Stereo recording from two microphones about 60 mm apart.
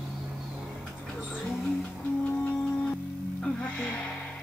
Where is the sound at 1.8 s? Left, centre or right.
Left.